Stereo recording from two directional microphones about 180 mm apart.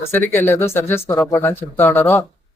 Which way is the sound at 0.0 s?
15° left (ahead or behind).